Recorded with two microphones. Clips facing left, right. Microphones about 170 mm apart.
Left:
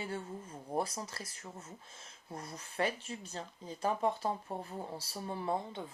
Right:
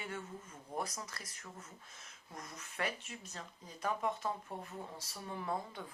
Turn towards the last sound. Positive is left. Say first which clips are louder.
# left 4 dB
turn(degrees=25)  # may be behind; listen again after turning